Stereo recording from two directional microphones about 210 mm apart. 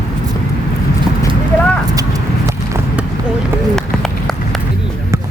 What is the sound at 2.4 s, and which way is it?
Run, 15° right (ahead or behind).